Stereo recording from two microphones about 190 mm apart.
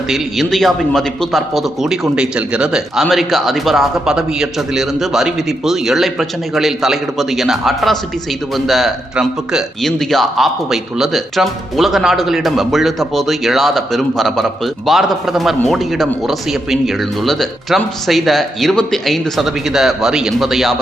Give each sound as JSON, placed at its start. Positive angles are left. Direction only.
{"t": 0.1, "sound": "a man's voice", "side_deg": 0}